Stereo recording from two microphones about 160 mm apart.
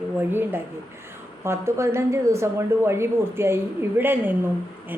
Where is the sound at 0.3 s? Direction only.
15° right (ahead or behind).